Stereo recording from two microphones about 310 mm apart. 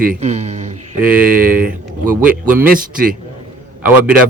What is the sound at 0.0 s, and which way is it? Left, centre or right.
Speech, right.